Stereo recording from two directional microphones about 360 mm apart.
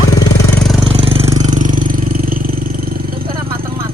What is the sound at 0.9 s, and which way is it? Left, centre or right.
Vehicle, centre.